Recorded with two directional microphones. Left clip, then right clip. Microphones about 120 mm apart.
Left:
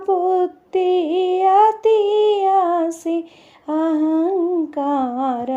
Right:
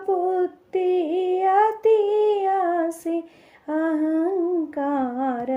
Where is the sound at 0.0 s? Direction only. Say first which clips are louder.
Left 5 dB; 30° left (ahead or behind).